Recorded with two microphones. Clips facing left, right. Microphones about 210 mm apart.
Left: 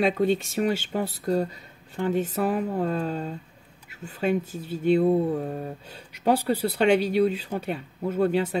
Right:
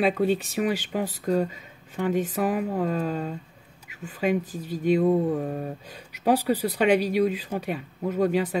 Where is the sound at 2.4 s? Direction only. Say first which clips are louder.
Even; 5° right (ahead or behind).